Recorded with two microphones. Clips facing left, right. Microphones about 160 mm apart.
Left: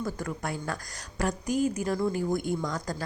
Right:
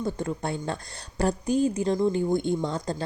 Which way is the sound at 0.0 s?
25° right (ahead or behind).